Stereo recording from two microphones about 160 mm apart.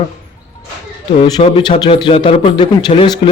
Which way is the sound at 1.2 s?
30° left (ahead or behind).